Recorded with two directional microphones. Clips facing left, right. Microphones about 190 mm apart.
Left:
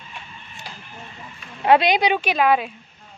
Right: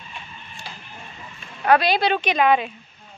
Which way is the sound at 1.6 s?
20° left (ahead or behind).